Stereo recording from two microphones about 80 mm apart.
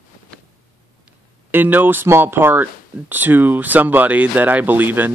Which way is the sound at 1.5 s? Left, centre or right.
Right.